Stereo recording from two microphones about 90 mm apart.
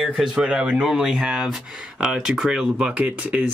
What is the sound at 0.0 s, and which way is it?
Speech, 10° right (ahead or behind).